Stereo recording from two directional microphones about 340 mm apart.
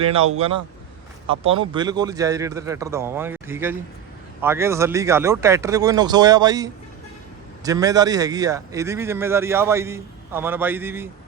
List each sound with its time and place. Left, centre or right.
0.0 s a man's voice: centre